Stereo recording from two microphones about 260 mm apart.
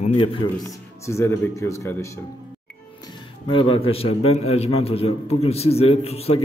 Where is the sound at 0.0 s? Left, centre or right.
Left.